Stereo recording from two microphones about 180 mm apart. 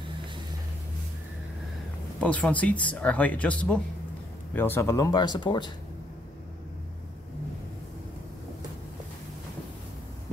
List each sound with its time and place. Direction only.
2.1 s speech: 5° left (ahead or behind); by 5.7 s 25° left (ahead or behind)